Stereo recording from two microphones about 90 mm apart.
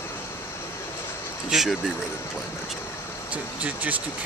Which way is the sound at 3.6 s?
15° right (ahead or behind).